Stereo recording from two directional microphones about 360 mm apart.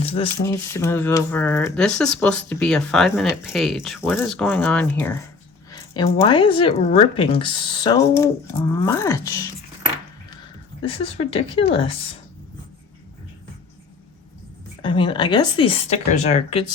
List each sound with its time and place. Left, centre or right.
0.0 s a sound: centre
0.3 s speech: centre
10.8 s speech: centre
14.8 s speech: centre